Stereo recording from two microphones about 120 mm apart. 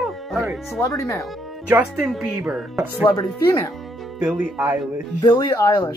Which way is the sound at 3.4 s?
25° left (ahead or behind).